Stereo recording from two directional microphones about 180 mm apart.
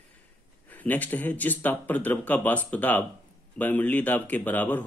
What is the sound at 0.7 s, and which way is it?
Speech, 10° left (ahead or behind).